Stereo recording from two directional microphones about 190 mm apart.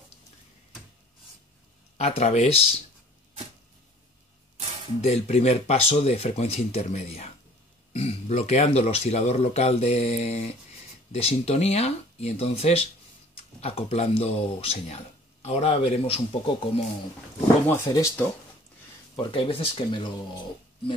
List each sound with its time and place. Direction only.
2.0 s speech: 35° left (ahead or behind)
5.0 s speech: 35° left (ahead or behind)
17.6 s speech: 15° left (ahead or behind)
19.1 s speech: 30° left (ahead or behind)